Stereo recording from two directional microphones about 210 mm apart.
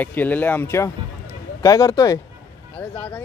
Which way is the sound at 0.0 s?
10° left (ahead or behind).